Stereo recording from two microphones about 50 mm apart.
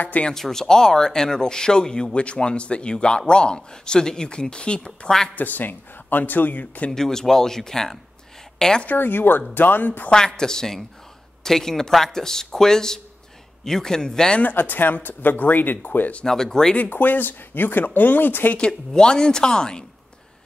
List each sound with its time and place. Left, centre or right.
0.3 s speech: centre
5.3 s speech: left
6.9 s a woman's voice: centre
8.8 s speech: left
10.1 s speech: centre
14.4 s speech: left
16.3 s speech: centre
16.9 s speech: left
18.6 s speech: centre